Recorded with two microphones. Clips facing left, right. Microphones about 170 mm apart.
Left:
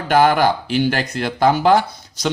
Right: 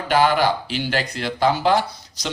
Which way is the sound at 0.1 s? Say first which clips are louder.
Left 3 dB; 50° left (ahead or behind).